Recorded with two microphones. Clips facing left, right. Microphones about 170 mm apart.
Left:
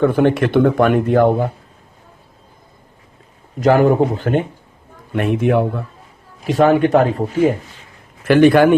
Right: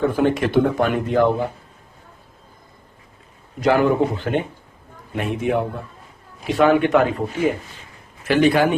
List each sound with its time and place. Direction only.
0.0 s speech: 60° left (ahead or behind)
3.6 s a man's voice: 45° left (ahead or behind)
5.1 s speech: 60° left (ahead or behind)
6.5 s speech: 40° left (ahead or behind)
8.2 s speech: 55° left (ahead or behind)